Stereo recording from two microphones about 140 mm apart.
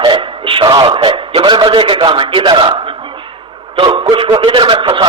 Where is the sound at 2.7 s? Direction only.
40° right (ahead or behind).